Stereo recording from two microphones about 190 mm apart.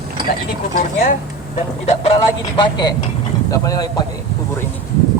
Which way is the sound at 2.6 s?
20° left (ahead or behind).